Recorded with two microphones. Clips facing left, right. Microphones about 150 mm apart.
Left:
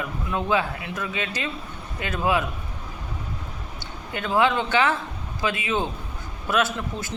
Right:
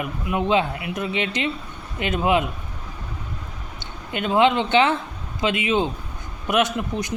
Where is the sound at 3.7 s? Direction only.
20° right (ahead or behind).